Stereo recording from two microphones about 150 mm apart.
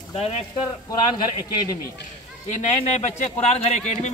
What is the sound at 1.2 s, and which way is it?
Speech, 30° left (ahead or behind).